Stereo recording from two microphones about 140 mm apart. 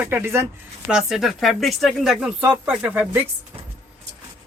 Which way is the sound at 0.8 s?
Centre (ahead or behind).